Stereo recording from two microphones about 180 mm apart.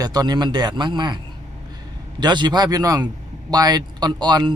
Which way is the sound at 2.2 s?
25° right (ahead or behind).